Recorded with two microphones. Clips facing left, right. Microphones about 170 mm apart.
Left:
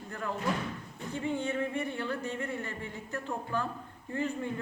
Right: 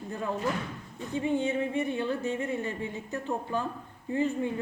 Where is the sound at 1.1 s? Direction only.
15° right (ahead or behind).